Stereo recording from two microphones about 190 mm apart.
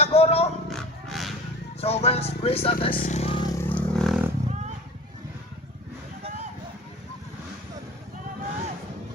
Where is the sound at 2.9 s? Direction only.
40° left (ahead or behind); by 4.1 s 5° left (ahead or behind).